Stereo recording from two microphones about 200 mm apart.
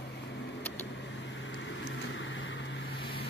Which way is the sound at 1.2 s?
65° left (ahead or behind).